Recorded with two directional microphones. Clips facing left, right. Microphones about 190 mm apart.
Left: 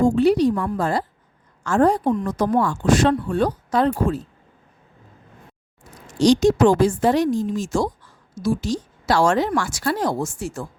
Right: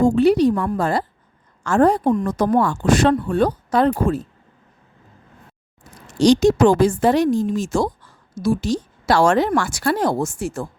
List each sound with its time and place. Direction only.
0.0 s a woman's voice: 65° right (ahead or behind)
6.1 s a woman's voice: 65° right (ahead or behind)